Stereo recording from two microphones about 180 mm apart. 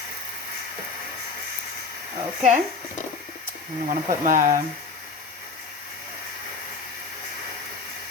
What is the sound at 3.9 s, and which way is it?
Speech, 45° right (ahead or behind).